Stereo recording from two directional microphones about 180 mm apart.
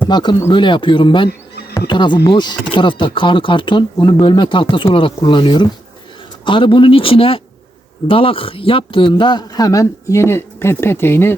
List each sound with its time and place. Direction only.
0.1 s speech: 25° left (ahead or behind)